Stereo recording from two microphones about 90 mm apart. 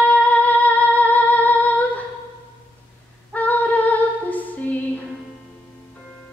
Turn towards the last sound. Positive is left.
turn(degrees=20)  # may be behind; listen again after turning